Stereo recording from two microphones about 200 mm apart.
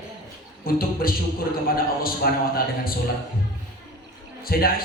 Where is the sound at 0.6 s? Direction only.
45° left (ahead or behind).